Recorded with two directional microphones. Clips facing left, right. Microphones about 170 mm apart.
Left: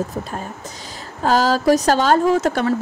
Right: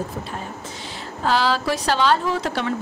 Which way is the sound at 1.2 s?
45° left (ahead or behind).